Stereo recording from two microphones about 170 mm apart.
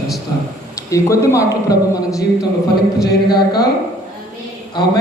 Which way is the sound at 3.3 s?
25° left (ahead or behind).